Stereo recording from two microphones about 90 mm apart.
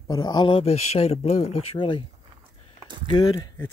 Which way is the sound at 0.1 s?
50° left (ahead or behind).